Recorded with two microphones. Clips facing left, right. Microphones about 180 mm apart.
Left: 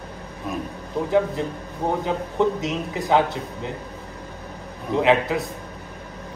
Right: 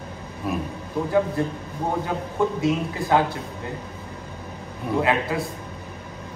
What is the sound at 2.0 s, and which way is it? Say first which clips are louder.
A man's voice: left 2 dB; 20° left (ahead or behind).